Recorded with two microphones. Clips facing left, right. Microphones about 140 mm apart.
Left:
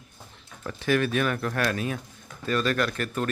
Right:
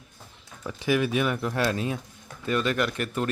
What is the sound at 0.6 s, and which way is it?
A man's voice, 10° right (ahead or behind).